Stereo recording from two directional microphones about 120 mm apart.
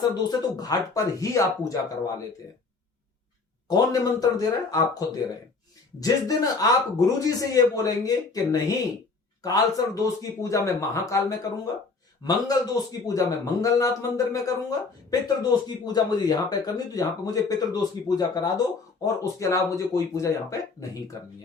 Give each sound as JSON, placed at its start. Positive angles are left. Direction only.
{"t": 0.1, "sound": "speech", "side_deg": 35}
{"t": 3.7, "sound": "a man's voice", "side_deg": 30}